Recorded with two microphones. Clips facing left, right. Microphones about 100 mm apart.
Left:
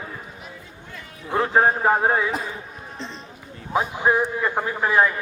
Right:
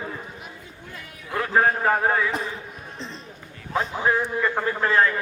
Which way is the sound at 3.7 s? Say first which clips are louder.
Left 2 dB; 15° left (ahead or behind).